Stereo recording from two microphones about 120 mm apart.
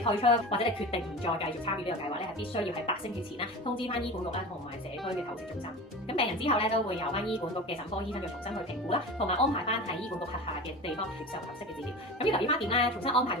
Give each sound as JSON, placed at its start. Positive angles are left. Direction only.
{"t": 0.0, "sound": "a woman's voice", "side_deg": 50}
{"t": 3.4, "sound": "a woman's voice", "side_deg": 50}
{"t": 6.1, "sound": "a woman's voice", "side_deg": 50}
{"t": 8.9, "sound": "speech", "side_deg": 55}
{"t": 12.2, "sound": "a woman's voice", "side_deg": 50}